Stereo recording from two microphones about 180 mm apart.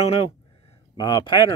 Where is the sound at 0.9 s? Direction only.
20° left (ahead or behind).